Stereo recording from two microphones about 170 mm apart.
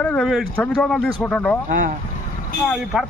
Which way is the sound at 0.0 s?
5° left (ahead or behind).